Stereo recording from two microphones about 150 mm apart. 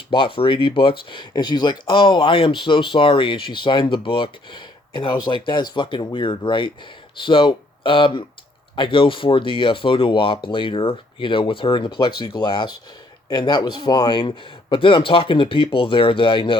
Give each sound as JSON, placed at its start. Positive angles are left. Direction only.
{"t": 0.1, "sound": "speech", "side_deg": 35}